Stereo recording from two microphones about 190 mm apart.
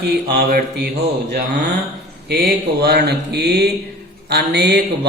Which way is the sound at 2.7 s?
60° right (ahead or behind).